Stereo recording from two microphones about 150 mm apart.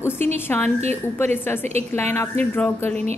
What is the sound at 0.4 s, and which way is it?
A woman's voice, 15° left (ahead or behind).